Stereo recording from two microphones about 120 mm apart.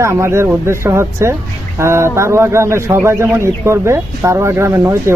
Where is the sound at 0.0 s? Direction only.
25° right (ahead or behind).